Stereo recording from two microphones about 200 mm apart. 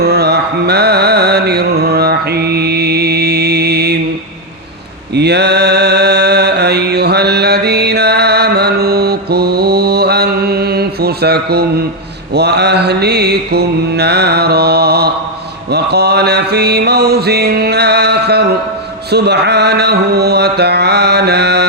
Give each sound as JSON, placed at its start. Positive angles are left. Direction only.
{"t": 0.0, "sound": "music", "side_deg": -55}
{"t": 5.1, "sound": "mantra", "side_deg": -55}